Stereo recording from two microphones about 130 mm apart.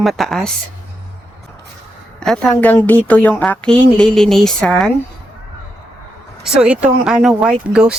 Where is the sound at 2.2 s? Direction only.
5° left (ahead or behind).